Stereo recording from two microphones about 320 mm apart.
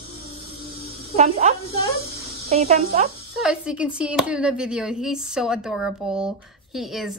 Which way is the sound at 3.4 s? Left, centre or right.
Centre.